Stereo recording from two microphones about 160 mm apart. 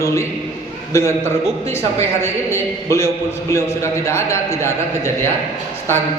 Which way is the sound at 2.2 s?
15° left (ahead or behind).